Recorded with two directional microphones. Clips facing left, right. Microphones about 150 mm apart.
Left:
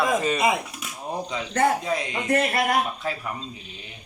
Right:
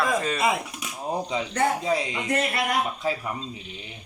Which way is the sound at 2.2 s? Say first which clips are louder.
Left 5 dB; 50° left (ahead or behind).